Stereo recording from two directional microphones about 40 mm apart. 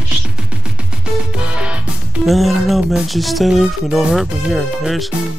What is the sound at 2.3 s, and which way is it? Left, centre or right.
Speech, centre.